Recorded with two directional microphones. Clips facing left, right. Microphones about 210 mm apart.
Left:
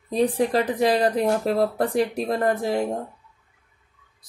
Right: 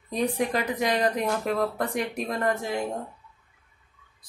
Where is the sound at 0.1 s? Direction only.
30° left (ahead or behind).